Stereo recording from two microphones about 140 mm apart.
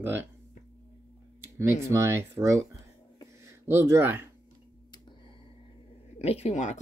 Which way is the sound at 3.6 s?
20° right (ahead or behind).